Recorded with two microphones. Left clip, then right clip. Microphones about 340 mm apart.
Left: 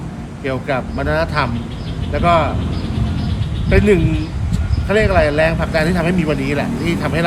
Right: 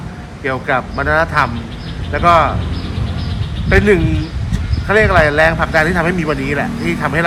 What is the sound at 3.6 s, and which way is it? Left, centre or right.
Speech, centre.